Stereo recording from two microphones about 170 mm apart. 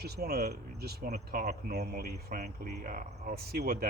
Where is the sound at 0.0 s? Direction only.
70° right (ahead or behind).